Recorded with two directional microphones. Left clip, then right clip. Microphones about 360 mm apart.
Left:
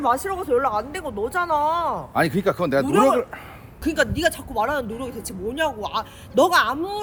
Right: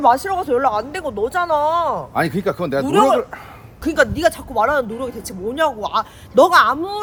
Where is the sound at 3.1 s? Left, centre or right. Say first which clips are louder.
Right 3 dB; centre.